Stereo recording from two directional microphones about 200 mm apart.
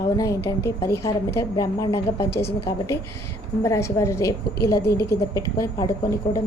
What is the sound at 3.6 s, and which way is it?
A woman's voice, 15° left (ahead or behind).